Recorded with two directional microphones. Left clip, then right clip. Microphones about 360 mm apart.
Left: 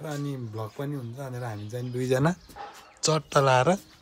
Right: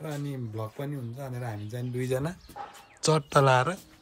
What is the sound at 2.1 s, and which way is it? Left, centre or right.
Speech, left.